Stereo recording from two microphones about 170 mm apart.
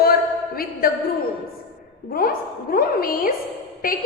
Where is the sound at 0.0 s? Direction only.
60° left (ahead or behind).